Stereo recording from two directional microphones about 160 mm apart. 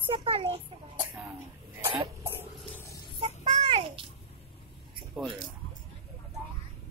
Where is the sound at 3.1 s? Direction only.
35° right (ahead or behind).